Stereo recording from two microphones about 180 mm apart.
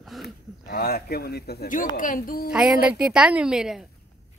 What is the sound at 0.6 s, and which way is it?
A woman's voice, 60° left (ahead or behind).